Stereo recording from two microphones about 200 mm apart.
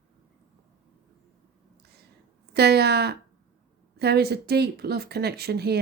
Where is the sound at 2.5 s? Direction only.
55° right (ahead or behind).